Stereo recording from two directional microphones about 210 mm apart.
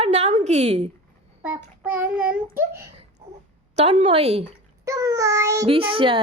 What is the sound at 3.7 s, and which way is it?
Speech, 30° right (ahead or behind).